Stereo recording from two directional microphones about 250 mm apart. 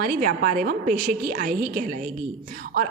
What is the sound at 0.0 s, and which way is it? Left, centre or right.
A woman's voice, right.